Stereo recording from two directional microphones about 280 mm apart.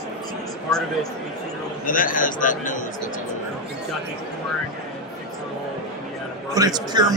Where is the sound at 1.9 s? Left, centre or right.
Left.